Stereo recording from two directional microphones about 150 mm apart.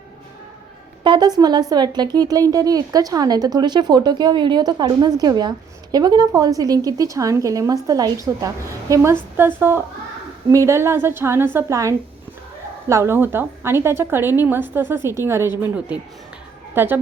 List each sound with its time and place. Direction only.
1.0 s a woman's voice: 30° right (ahead or behind); by 17.0 s 15° right (ahead or behind)